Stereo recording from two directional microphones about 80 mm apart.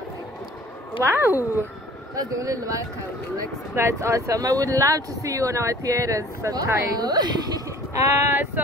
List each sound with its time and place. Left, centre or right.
1.0 s speech: right
2.1 s speech: right
7.9 s speech: right